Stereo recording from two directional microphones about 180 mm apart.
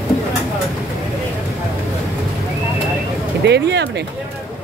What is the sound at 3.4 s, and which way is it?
Speech, 70° right (ahead or behind).